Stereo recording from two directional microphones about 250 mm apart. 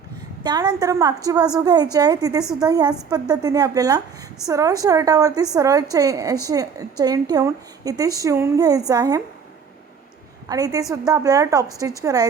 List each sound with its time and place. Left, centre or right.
0.4 s a woman's voice: centre
10.5 s a woman's voice: centre